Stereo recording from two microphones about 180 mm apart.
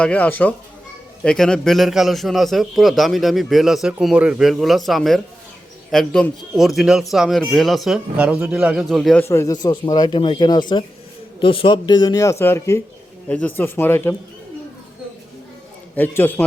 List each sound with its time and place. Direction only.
0.0 s a man's voice: 10° left (ahead or behind)
9.2 s speech: 15° left (ahead or behind)
16.0 s speech: 10° left (ahead or behind)